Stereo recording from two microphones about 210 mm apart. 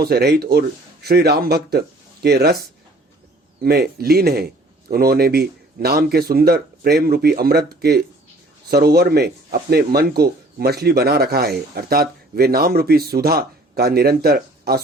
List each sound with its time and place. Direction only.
0.0 s speech: 50° right (ahead or behind)
3.6 s speech: 50° right (ahead or behind)